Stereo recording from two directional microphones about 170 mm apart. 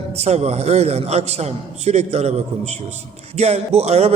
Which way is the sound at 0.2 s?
40° right (ahead or behind).